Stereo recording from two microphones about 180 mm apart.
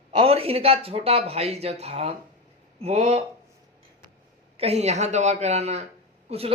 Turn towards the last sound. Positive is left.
turn(degrees=-30)  # may be behind; listen again after turning